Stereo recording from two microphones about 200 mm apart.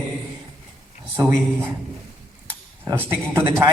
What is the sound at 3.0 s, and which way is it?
Speech, 10° right (ahead or behind).